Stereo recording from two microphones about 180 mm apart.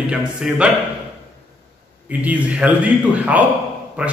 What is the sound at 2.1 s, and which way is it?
A man's voice, 10° right (ahead or behind).